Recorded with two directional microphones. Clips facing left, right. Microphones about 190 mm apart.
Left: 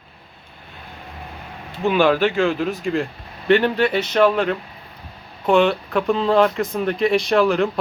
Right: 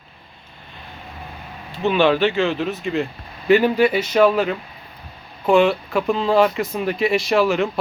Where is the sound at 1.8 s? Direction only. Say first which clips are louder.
Even; centre (ahead or behind).